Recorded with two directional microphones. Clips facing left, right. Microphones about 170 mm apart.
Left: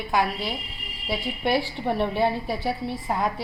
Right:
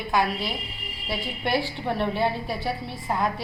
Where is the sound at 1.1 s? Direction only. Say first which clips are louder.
Left 2 dB; 15° left (ahead or behind).